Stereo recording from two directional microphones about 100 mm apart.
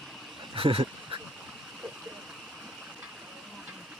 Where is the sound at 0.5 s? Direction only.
65° right (ahead or behind).